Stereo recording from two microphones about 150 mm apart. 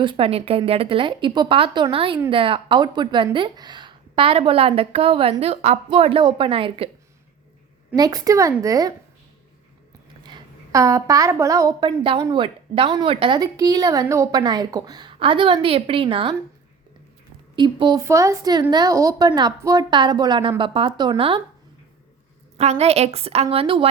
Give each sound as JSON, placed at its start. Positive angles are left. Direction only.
{"t": 0.0, "sound": "speech", "side_deg": -35}
{"t": 7.9, "sound": "a woman's voice", "side_deg": -25}
{"t": 10.2, "sound": "a woman's voice", "side_deg": -25}
{"t": 11.9, "sound": "speech", "side_deg": -35}
{"t": 17.5, "sound": "speech", "side_deg": -35}
{"t": 18.0, "sound": "a woman's voice", "side_deg": -20}
{"t": 22.5, "sound": "a woman's voice", "side_deg": -45}